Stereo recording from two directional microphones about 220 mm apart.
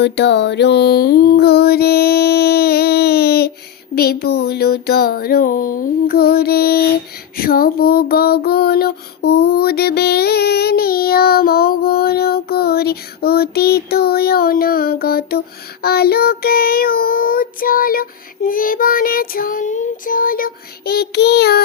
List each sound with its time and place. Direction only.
0.0 s music: 50° left (ahead or behind)
3.9 s child singing: 45° left (ahead or behind)